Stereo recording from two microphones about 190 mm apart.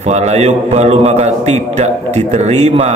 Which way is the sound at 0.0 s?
35° right (ahead or behind).